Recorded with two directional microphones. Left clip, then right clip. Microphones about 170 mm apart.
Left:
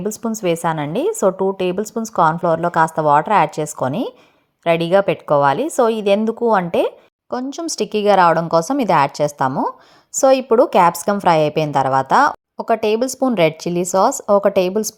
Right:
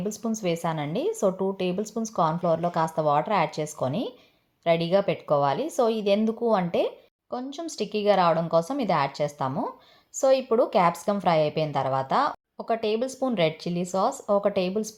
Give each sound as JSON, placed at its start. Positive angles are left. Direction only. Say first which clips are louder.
{"t": 0.0, "sound": "a woman's voice", "louder": "left 8 dB", "side_deg": 35}